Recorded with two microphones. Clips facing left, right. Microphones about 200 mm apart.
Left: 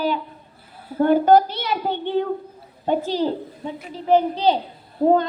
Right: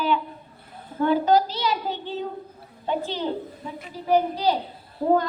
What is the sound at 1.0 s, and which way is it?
A child's voice, 50° left (ahead or behind).